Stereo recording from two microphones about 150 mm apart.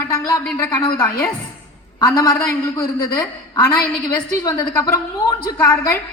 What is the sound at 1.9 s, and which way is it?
Speech, 25° left (ahead or behind).